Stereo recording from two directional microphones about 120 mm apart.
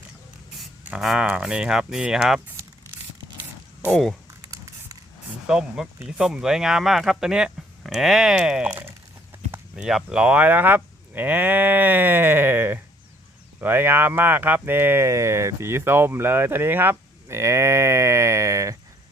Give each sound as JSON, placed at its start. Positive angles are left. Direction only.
{"t": 0.9, "sound": "speech", "side_deg": -5}
{"t": 4.5, "sound": "a sound", "side_deg": -25}
{"t": 5.5, "sound": "speech", "side_deg": -5}